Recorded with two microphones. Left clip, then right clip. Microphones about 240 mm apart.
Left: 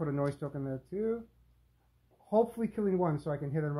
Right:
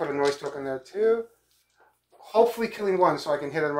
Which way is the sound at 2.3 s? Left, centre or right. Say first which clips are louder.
Right 8 dB; left.